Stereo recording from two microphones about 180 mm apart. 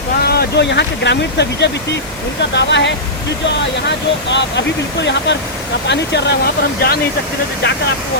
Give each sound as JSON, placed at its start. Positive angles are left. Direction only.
{"t": 0.2, "sound": "speech", "side_deg": 65}